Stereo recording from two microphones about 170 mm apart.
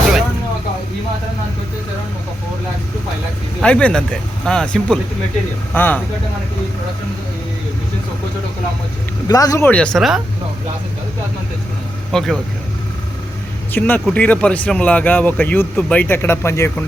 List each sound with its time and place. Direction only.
3.6 s speech: 5° left (ahead or behind)
9.2 s speech: 20° left (ahead or behind)
9.6 s speech: 5° left (ahead or behind)
12.1 s speech: centre (ahead or behind)
13.7 s speech: 10° left (ahead or behind)